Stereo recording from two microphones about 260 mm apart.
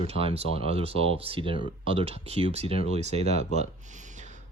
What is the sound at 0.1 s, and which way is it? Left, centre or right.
Speech, right.